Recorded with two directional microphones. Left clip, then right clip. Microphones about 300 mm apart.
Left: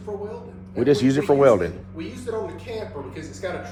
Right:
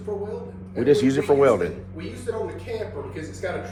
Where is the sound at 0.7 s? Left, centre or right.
Left.